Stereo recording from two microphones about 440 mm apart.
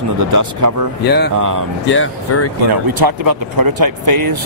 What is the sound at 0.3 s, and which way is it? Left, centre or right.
Speech, right.